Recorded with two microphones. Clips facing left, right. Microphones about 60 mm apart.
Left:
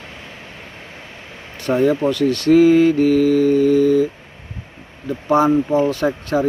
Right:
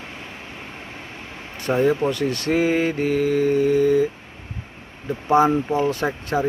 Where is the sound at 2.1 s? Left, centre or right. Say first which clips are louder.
Left 8 dB; right.